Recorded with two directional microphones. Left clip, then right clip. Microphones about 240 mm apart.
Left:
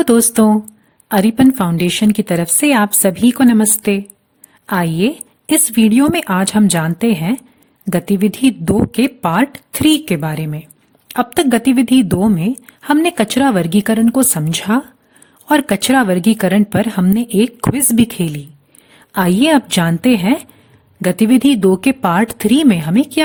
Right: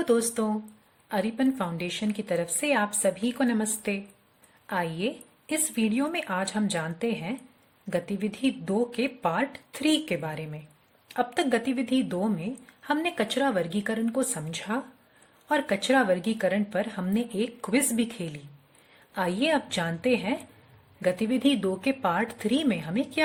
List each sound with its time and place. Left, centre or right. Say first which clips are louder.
0.0 s a woman's voice: left 13 dB; left